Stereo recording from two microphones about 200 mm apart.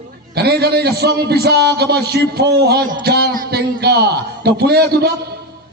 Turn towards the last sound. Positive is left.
turn(degrees=-55)  # may be behind; listen again after turning